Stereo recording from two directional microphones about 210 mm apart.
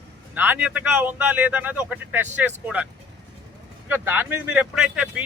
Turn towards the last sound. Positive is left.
turn(degrees=-5)  # may be behind; listen again after turning